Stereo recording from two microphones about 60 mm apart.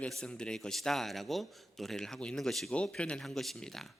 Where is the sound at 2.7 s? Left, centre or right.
Centre.